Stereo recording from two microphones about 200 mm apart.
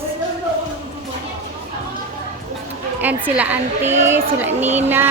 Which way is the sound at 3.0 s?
10° right (ahead or behind).